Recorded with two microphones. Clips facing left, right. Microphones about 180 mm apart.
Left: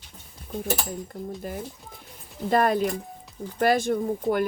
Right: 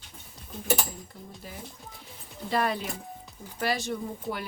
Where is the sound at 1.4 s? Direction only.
50° left (ahead or behind).